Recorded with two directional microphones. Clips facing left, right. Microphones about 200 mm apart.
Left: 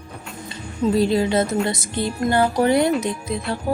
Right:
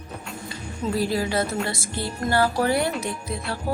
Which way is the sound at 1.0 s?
20° left (ahead or behind).